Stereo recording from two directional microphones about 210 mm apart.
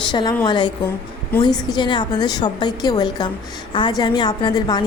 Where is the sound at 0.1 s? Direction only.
20° left (ahead or behind).